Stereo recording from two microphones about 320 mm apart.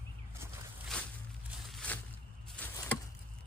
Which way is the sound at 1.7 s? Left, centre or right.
Centre.